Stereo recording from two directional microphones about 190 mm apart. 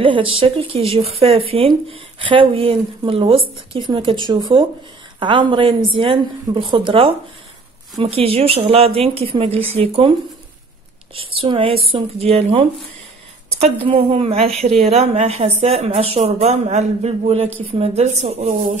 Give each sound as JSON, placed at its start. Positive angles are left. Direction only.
{"t": 0.0, "sound": "a woman's voice", "side_deg": -25}
{"t": 11.1, "sound": "a woman's voice", "side_deg": -30}